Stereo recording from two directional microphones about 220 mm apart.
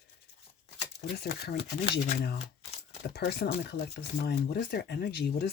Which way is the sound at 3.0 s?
45° left (ahead or behind).